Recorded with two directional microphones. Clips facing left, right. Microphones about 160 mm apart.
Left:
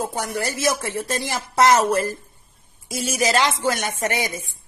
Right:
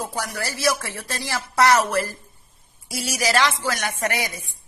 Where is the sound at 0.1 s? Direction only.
20° left (ahead or behind).